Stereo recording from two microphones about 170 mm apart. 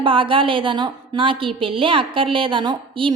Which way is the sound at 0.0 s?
30° right (ahead or behind).